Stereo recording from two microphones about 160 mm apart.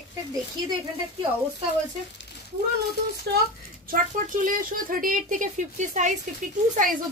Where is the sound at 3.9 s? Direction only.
60° right (ahead or behind).